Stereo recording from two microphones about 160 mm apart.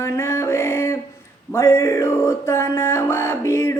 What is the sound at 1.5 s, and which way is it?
Music, 15° left (ahead or behind).